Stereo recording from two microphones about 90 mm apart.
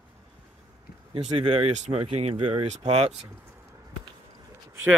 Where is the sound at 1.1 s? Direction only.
90° right.